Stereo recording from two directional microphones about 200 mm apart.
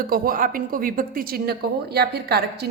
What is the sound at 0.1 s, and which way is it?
Speech, 45° right (ahead or behind).